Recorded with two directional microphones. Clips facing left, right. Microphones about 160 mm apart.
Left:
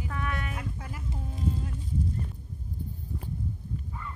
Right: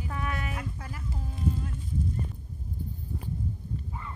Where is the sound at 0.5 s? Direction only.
20° left (ahead or behind).